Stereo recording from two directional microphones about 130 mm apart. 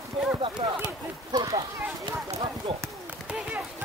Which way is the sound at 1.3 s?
30° right (ahead or behind).